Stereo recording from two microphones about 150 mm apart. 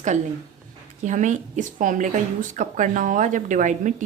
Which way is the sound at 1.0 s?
55° right (ahead or behind).